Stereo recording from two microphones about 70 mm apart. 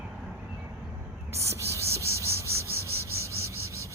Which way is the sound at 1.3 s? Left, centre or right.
Right.